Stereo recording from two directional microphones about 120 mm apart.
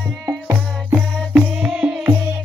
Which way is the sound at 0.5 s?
10° right (ahead or behind).